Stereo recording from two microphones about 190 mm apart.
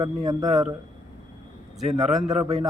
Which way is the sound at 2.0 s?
Centre (ahead or behind).